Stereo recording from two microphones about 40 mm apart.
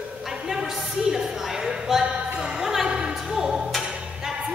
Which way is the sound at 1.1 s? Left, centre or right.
Centre.